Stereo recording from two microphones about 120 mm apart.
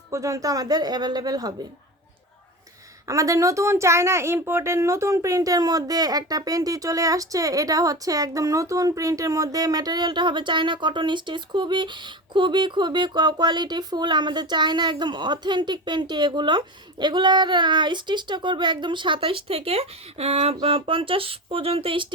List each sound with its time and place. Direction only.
0.1 s speech: 25° right (ahead or behind)
3.1 s speech: 25° right (ahead or behind); by 22.1 s 45° right (ahead or behind)